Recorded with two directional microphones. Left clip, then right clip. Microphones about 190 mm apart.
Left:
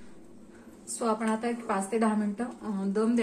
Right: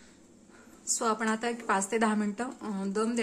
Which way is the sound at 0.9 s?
35° right (ahead or behind).